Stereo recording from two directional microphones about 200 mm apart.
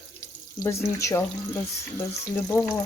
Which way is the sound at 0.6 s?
15° left (ahead or behind).